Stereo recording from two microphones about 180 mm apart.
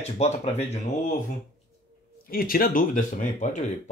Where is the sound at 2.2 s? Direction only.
55° left (ahead or behind).